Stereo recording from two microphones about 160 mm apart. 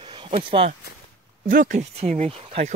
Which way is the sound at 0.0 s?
35° right (ahead or behind).